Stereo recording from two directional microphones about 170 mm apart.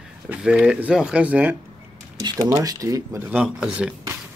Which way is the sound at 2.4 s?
20° right (ahead or behind).